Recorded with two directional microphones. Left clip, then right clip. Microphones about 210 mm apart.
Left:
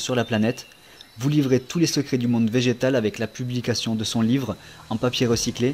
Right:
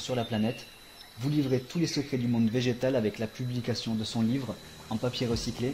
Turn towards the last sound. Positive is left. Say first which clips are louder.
# left 9 dB
turn(degrees=30)  # may be behind; listen again after turning